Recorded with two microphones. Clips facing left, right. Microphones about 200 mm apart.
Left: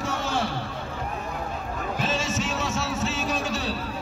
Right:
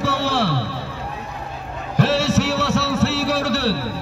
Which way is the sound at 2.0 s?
70° right (ahead or behind).